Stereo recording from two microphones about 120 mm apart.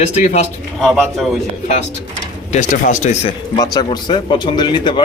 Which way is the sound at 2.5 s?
90° left.